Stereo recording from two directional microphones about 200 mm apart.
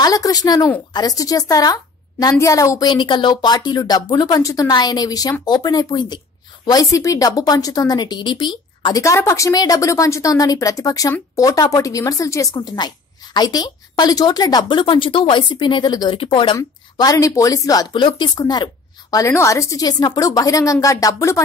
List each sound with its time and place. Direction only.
0.0 s a woman's voice: 20° left (ahead or behind)